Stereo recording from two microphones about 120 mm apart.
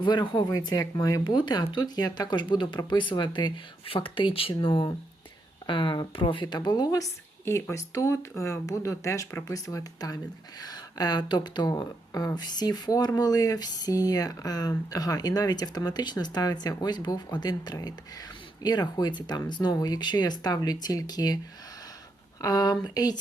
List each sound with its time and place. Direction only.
0.0 s speech: 40° left (ahead or behind)
22.4 s speech: 30° left (ahead or behind)